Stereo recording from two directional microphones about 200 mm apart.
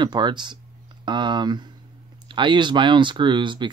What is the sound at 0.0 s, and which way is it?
Speech, 20° right (ahead or behind).